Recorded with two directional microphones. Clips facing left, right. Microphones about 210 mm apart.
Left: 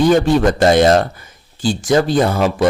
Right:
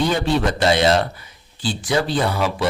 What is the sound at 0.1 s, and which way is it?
A man's voice, 45° left (ahead or behind).